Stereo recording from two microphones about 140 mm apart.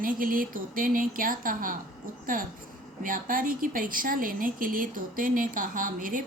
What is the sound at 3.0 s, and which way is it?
A woman's voice, 80° right.